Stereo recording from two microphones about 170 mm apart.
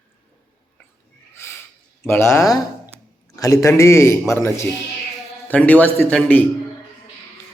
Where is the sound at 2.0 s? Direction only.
15° left (ahead or behind).